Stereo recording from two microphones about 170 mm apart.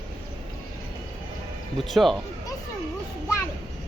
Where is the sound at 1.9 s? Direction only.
Centre (ahead or behind).